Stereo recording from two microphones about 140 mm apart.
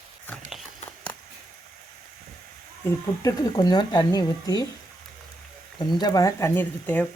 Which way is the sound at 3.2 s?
25° left (ahead or behind).